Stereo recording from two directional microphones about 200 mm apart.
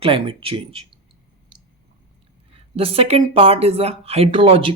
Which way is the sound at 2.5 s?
30° right (ahead or behind).